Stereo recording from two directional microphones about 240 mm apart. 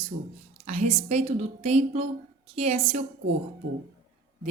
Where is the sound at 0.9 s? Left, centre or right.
Right.